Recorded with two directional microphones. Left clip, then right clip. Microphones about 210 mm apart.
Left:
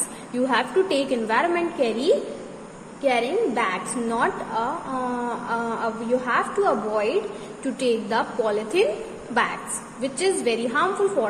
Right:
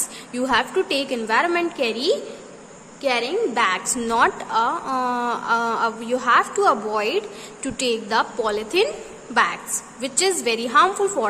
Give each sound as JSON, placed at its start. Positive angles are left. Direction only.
{"t": 0.3, "sound": "a woman's voice", "side_deg": -15}